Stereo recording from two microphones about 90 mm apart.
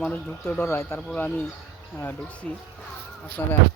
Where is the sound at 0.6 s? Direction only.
30° left (ahead or behind).